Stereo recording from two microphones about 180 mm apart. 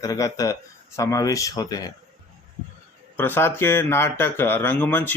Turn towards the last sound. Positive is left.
turn(degrees=10)  # may be behind; listen again after turning